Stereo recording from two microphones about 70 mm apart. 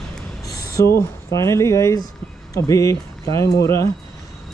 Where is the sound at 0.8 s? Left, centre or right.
Left.